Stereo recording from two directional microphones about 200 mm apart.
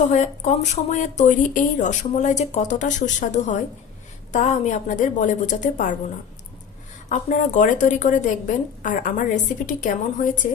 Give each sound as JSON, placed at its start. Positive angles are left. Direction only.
{"t": 0.1, "sound": "speech", "side_deg": 35}
{"t": 7.1, "sound": "speech", "side_deg": 35}